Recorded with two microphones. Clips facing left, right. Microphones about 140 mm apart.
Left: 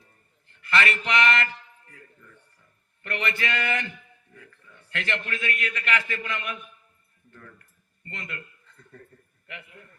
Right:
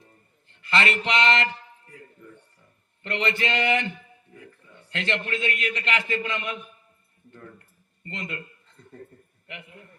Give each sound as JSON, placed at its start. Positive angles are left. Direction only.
{"t": 0.4, "sound": "a man's voice", "side_deg": -20}
{"t": 7.3, "sound": "a sound", "side_deg": -25}
{"t": 9.5, "sound": "speech", "side_deg": -20}